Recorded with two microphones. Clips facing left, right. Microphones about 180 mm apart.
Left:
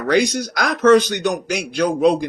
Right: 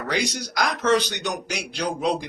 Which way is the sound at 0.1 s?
55° left (ahead or behind).